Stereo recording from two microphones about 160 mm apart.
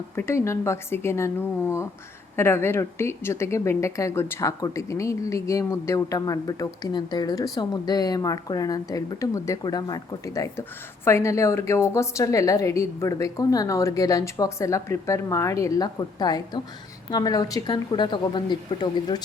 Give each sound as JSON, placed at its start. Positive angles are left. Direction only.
{"t": 0.2, "sound": "a woman's voice", "side_deg": 15}